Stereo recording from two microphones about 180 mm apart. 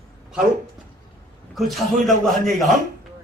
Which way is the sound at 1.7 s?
Centre (ahead or behind).